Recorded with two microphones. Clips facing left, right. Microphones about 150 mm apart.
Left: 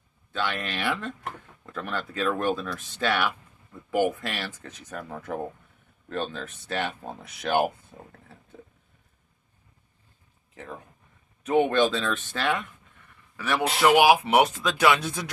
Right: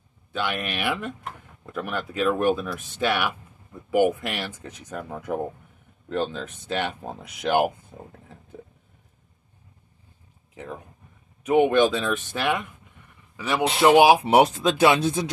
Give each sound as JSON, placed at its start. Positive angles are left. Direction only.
{"t": 0.3, "sound": "speech", "side_deg": -10}
{"t": 10.5, "sound": "a sound", "side_deg": -15}
{"t": 11.4, "sound": "speech", "side_deg": -15}